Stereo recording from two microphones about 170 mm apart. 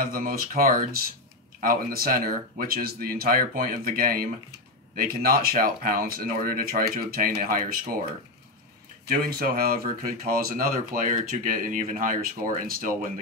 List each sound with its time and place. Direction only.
0.0 s speech: 60° right (ahead or behind)
9.1 s speech: 60° right (ahead or behind)